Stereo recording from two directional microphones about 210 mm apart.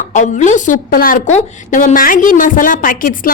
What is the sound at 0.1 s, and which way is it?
A woman's voice, 35° left (ahead or behind).